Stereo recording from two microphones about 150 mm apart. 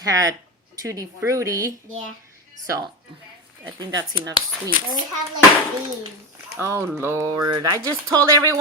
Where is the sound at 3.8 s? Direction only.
25° right (ahead or behind).